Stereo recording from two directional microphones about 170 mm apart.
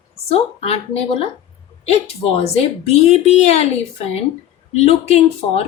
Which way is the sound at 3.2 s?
40° left (ahead or behind).